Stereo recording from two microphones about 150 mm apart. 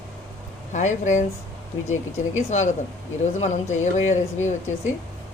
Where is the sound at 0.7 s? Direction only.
55° left (ahead or behind).